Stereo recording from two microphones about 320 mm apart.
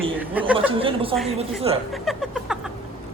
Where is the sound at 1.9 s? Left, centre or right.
Centre.